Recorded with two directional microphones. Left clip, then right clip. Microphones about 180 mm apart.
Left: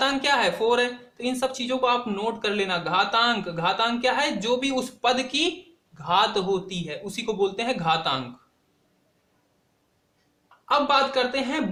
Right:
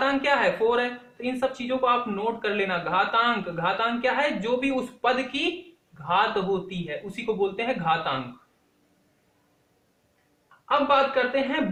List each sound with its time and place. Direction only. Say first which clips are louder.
0.0 s speech: even; 35° left (ahead or behind)
10.7 s speech: even; 40° left (ahead or behind)